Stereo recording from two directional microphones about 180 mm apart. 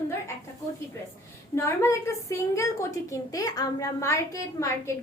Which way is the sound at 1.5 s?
15° left (ahead or behind).